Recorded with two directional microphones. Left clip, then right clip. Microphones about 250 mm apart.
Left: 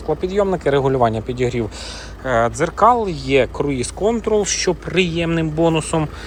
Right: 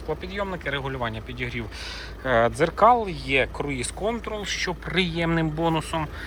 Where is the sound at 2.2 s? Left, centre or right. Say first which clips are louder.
Left 3 dB; centre.